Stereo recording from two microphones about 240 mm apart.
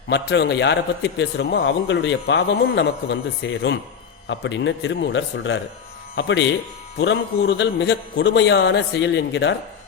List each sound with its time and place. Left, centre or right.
0.1 s a man's voice: left